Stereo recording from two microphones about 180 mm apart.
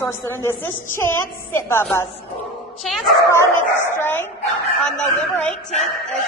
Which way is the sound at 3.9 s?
10° left (ahead or behind).